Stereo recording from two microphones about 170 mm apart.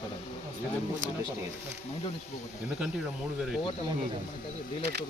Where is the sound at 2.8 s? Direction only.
5° right (ahead or behind).